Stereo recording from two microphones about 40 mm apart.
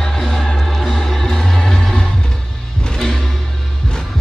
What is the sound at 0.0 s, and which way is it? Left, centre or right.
Music, centre.